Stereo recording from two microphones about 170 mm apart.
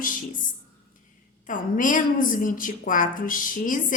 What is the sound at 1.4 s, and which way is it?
A woman's voice, 50° left (ahead or behind).